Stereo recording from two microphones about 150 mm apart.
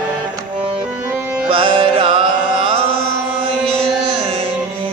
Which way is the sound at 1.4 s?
35° right (ahead or behind).